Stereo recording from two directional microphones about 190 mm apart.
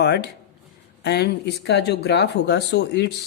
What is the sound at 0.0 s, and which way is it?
Speech, 60° left (ahead or behind).